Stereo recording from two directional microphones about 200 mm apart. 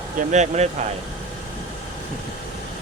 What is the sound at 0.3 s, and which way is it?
Speech, 35° right (ahead or behind).